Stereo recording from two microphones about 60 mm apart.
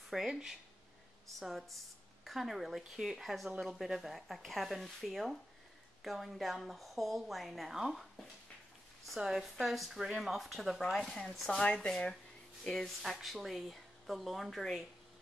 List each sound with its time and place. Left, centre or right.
0.1 s speech: centre
11.6 s speech: centre
12.6 s speech: centre